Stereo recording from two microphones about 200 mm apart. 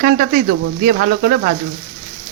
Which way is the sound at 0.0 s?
45° right (ahead or behind).